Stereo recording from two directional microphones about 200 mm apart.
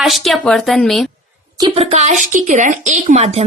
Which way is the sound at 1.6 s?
30° right (ahead or behind).